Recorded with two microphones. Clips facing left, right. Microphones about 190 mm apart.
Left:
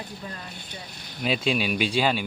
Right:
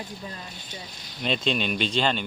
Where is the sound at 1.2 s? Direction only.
5° left (ahead or behind).